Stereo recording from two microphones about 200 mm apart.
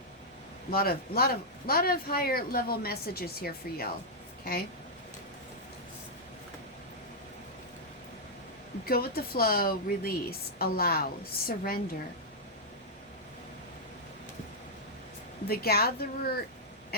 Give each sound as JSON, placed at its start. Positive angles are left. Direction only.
{"t": 0.7, "sound": "speech", "side_deg": 50}
{"t": 8.9, "sound": "speech", "side_deg": 50}
{"t": 15.4, "sound": "speech", "side_deg": 50}